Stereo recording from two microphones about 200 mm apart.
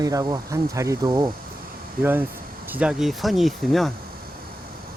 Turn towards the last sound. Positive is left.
turn(degrees=0)  # may be behind; listen again after turning